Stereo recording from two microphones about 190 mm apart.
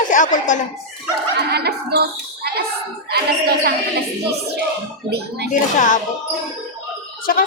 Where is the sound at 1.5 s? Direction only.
60° right (ahead or behind).